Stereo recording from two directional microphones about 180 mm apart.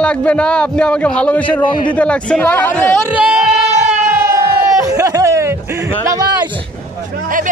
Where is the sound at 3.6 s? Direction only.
40° right (ahead or behind).